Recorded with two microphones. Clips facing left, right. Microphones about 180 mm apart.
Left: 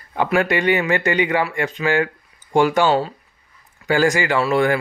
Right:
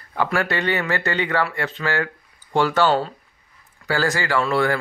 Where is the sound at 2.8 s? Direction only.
5° left (ahead or behind).